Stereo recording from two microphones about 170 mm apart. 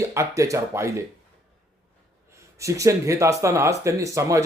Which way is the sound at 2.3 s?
20° right (ahead or behind).